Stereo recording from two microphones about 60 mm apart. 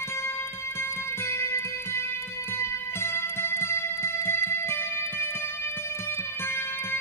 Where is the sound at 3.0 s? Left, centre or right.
Left.